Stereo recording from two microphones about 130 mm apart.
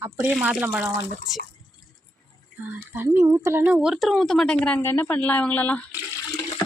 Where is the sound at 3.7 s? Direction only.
5° right (ahead or behind); by 5.8 s 10° left (ahead or behind).